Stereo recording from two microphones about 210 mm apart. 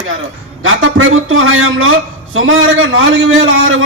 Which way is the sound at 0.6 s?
65° right (ahead or behind).